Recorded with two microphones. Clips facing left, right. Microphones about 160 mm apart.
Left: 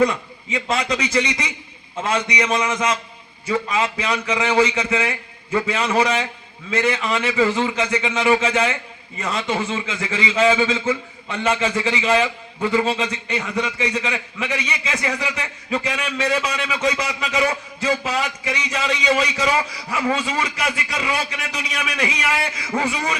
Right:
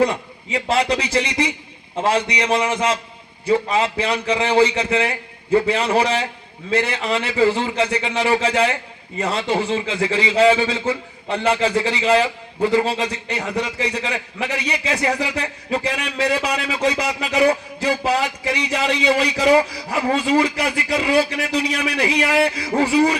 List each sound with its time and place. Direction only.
0.0 s a man's voice: 35° right (ahead or behind)